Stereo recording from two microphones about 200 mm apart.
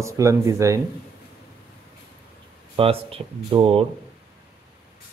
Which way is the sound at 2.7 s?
30° right (ahead or behind).